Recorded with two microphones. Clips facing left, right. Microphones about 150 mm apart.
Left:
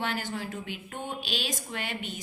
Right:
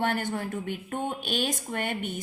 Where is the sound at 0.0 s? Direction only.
55° right (ahead or behind).